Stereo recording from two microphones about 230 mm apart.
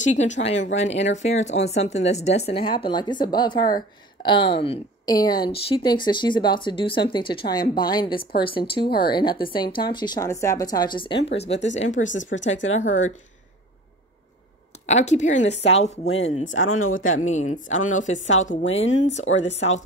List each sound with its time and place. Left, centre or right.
0.0 s speech: left
11.6 s speech: left
14.9 s speech: left
16.1 s speech: left
17.2 s speech: left
18.2 s speech: left